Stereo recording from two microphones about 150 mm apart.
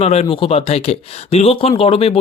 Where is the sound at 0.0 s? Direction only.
45° left (ahead or behind).